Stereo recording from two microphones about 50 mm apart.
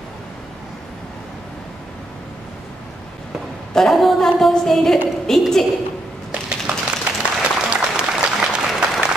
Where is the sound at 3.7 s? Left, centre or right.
Centre.